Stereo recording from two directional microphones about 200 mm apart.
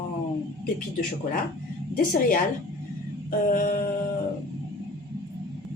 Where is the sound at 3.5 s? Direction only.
40° left (ahead or behind).